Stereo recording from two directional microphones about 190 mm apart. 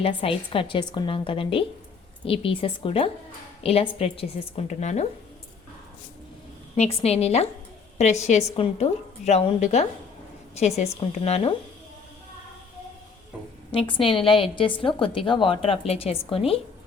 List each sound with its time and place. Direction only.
0.0 s a woman's voice: 30° left (ahead or behind)
6.7 s a woman's voice: 35° left (ahead or behind)
13.7 s a woman's voice: 25° left (ahead or behind)